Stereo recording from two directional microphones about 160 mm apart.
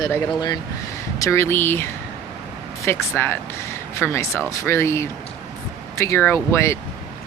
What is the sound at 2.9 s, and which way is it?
Speech, 15° left (ahead or behind).